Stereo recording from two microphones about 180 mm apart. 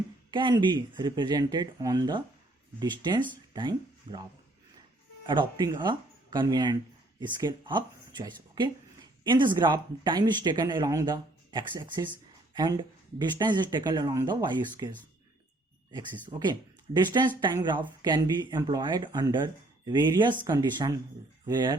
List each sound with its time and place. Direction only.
0.3 s speech: 25° right (ahead or behind)
5.2 s speech: 25° right (ahead or behind)
16.4 s speech: 25° right (ahead or behind)